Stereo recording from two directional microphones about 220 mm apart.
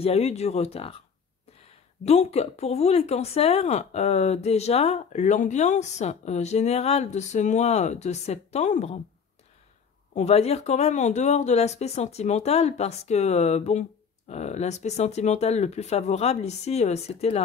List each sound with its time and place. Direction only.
0.0 s speech: 30° left (ahead or behind)
2.0 s speech: 30° left (ahead or behind)
10.1 s speech: 30° left (ahead or behind)